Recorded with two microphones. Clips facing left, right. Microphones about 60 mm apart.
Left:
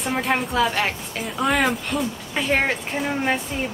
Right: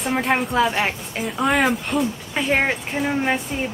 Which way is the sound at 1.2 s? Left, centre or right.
Centre.